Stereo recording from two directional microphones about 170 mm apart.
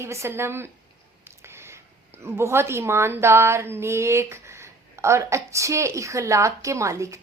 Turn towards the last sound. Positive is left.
turn(degrees=-20)  # may be behind; listen again after turning